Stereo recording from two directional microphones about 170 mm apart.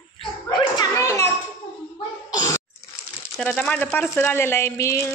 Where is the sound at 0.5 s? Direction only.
20° left (ahead or behind).